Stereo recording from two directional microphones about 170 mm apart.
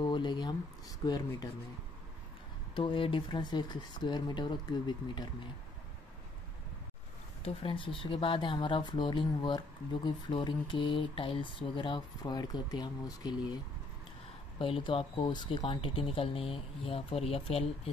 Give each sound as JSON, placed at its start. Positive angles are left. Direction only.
{"t": 0.0, "sound": "speech", "side_deg": 25}
{"t": 2.7, "sound": "speech", "side_deg": 30}
{"t": 7.4, "sound": "speech", "side_deg": 30}
{"t": 14.6, "sound": "speech", "side_deg": 30}